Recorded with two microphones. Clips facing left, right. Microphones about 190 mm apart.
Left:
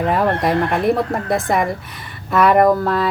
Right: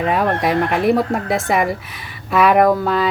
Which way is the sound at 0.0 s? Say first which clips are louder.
Even; centre (ahead or behind).